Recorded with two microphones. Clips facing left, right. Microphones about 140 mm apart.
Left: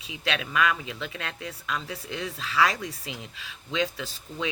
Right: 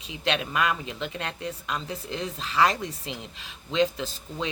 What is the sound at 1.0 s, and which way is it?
Speech, 35° right (ahead or behind).